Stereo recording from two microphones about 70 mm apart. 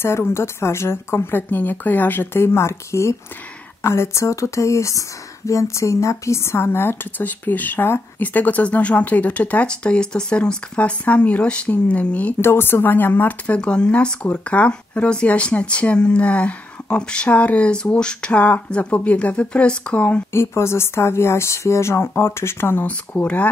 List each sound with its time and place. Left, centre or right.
0.3 s a woman's voice: left
2.4 s a woman's voice: left
12.4 s speech: left
13.6 s speech: centre
20.3 s a woman's voice: left
22.8 s speech: left